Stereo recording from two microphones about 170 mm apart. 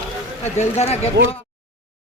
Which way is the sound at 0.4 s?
40° left (ahead or behind).